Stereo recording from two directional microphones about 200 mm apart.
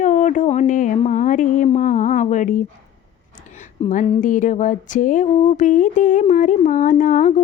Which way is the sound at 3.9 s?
40° left (ahead or behind).